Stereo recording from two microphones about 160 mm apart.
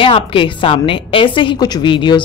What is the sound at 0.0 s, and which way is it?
A woman's voice, 35° left (ahead or behind).